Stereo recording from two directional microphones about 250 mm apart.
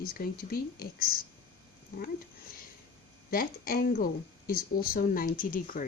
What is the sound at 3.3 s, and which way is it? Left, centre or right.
Speech, left.